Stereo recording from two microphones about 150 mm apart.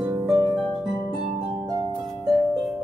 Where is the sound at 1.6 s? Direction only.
30° right (ahead or behind).